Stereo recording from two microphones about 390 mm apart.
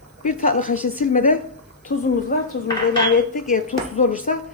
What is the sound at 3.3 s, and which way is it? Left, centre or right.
Speech, centre.